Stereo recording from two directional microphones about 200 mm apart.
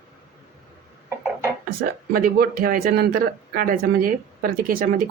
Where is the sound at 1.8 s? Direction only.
50° right (ahead or behind).